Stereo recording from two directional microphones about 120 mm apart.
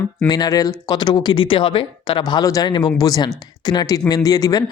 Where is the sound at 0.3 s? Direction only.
30° left (ahead or behind).